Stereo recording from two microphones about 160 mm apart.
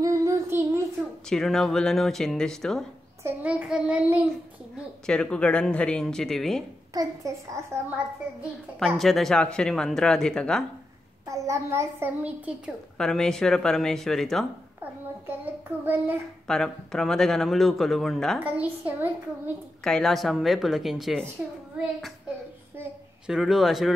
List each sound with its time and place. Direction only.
0.0 s child singing: 20° right (ahead or behind)
1.3 s a woman's voice: 5° left (ahead or behind)
3.3 s a child's voice: 10° right (ahead or behind)
5.0 s a woman's voice: 5° left (ahead or behind)
6.9 s a child's voice: 20° right (ahead or behind)
8.4 s a woman's voice: centre (ahead or behind)
11.2 s a child's voice: 20° right (ahead or behind)
12.9 s a woman's voice: 5° left (ahead or behind)
14.8 s a child's voice: 10° right (ahead or behind)
16.4 s a woman's voice: 5° left (ahead or behind)
18.4 s a child's voice: 10° right (ahead or behind)
19.8 s a woman's voice: 5° left (ahead or behind)
22.8 s a child's voice: 5° right (ahead or behind)